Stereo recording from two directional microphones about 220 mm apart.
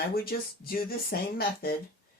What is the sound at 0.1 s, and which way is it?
Speech, 45° left (ahead or behind).